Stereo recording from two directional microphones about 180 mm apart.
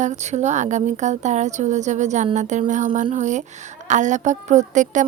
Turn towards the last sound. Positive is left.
turn(degrees=-45)  # may be behind; listen again after turning